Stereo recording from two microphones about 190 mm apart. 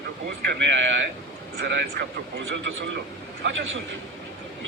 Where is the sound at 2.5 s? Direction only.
75° right (ahead or behind).